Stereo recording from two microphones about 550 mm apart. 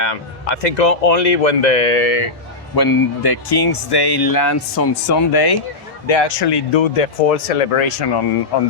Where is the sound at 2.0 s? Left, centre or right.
Left.